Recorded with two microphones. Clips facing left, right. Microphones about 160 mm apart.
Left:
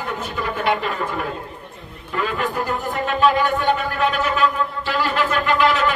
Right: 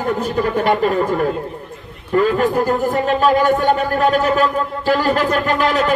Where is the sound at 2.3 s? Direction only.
40° right (ahead or behind).